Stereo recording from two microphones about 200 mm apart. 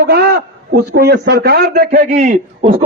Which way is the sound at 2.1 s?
35° right (ahead or behind).